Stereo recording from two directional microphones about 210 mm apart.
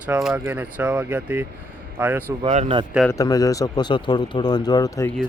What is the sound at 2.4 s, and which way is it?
Speech, 30° right (ahead or behind).